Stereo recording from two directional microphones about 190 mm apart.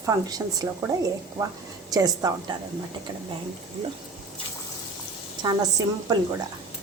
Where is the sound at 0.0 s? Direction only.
20° right (ahead or behind).